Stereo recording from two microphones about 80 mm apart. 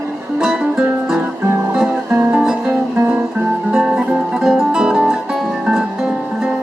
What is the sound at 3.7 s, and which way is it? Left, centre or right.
Music, centre.